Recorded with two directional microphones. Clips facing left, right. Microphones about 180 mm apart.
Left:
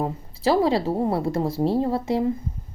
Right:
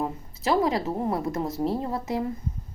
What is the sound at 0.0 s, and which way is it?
Speech, 30° left (ahead or behind).